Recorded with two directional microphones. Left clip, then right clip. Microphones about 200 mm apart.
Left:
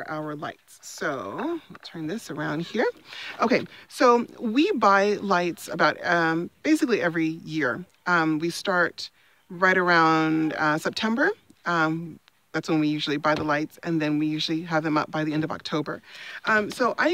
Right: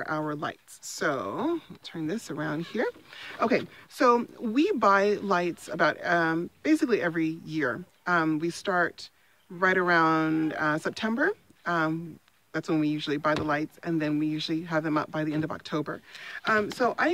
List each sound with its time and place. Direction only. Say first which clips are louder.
0.0 s speech: right 1 dB; 10° right (ahead or behind)
2.0 s speech: left 2 dB; 20° left (ahead or behind); by 17.1 s 35° left (ahead or behind)